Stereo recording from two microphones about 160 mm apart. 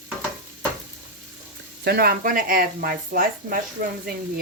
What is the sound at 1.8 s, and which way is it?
Speech, 75° right (ahead or behind).